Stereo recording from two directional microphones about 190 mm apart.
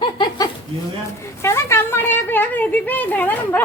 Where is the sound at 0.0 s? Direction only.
25° left (ahead or behind).